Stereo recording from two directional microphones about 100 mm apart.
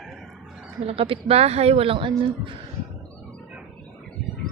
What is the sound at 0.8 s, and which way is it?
Speech, 65° right (ahead or behind).